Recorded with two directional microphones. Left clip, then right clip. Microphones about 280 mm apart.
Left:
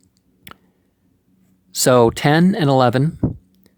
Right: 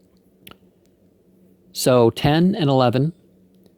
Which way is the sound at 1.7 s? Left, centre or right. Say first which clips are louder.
Left 3 dB; centre.